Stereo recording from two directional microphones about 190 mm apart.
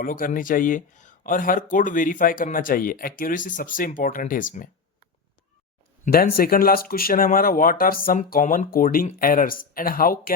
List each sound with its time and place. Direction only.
0.0 s speech: 45° left (ahead or behind)
6.1 s speech: 50° left (ahead or behind)